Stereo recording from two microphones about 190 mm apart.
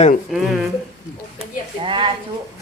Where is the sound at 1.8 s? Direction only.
25° right (ahead or behind).